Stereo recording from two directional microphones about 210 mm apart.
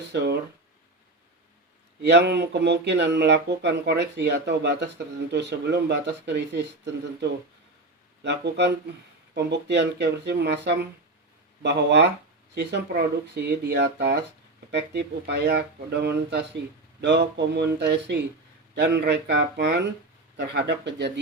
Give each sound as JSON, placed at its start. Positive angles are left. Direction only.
{"t": 0.1, "sound": "speech", "side_deg": -55}
{"t": 2.0, "sound": "speech", "side_deg": -55}